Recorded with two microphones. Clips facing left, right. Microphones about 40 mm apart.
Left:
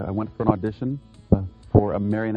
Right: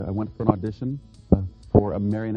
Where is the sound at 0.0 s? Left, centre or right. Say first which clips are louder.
Left 1 dB; left.